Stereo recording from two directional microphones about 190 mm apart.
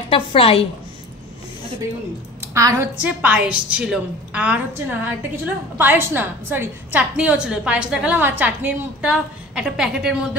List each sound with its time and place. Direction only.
0.1 s a woman's voice: 30° left (ahead or behind)
2.5 s a woman's voice: 15° right (ahead or behind)